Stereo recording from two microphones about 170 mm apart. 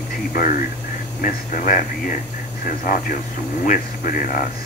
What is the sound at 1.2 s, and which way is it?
Speech, 50° left (ahead or behind).